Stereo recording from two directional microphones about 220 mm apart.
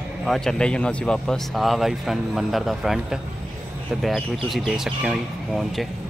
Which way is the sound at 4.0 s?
Centre (ahead or behind).